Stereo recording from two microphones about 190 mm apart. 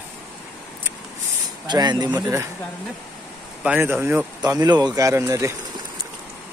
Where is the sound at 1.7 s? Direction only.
20° right (ahead or behind).